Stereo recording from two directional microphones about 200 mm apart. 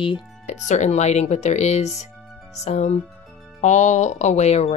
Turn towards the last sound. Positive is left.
turn(degrees=35)  # may be behind; listen again after turning